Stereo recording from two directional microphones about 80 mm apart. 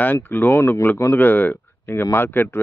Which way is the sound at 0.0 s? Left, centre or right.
Left.